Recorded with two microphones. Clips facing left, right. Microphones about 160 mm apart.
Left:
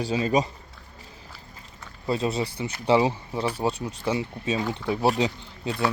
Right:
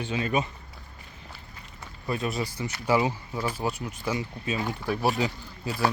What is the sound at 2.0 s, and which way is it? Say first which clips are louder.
Speech: left 4 dB; 25° left (ahead or behind).